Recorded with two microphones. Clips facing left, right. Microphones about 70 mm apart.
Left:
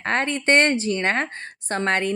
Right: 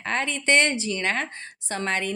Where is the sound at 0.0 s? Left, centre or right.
Left.